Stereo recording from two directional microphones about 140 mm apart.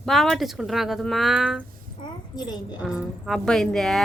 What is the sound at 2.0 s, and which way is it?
Speech, 30° left (ahead or behind).